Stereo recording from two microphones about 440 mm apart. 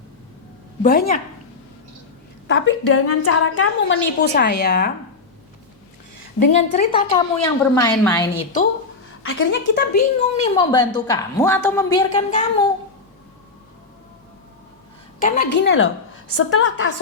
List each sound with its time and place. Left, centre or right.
0.8 s a woman's voice: centre
2.5 s a woman's voice: left
6.4 s a woman's voice: centre
9.2 s a woman's voice: left
15.2 s a woman's voice: left